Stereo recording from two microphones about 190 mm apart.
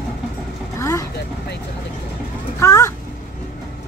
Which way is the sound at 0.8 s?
15° left (ahead or behind).